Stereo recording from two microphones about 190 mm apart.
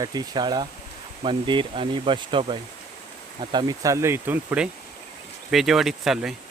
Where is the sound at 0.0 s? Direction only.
20° right (ahead or behind).